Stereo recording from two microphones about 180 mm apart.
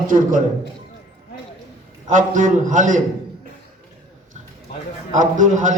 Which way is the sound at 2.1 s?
45° right (ahead or behind).